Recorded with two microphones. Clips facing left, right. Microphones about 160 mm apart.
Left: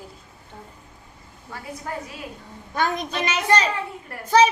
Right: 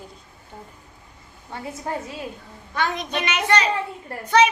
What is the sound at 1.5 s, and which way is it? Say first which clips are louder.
Speech: right 3 dB; 25° right (ahead or behind).